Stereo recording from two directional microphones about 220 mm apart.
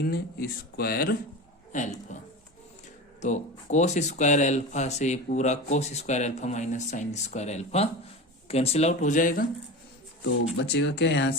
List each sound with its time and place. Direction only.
0.0 s speech: 45° left (ahead or behind)
3.2 s speech: 30° left (ahead or behind)
10.2 s speech: 50° left (ahead or behind)